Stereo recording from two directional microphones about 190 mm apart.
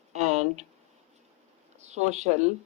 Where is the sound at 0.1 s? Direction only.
35° right (ahead or behind).